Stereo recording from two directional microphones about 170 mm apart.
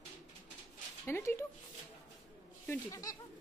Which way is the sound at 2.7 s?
20° left (ahead or behind).